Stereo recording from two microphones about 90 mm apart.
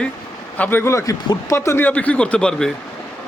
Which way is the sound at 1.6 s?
25° left (ahead or behind).